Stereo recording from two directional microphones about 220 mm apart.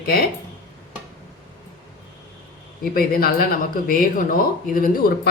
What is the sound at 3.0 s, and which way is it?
Speech, 40° left (ahead or behind).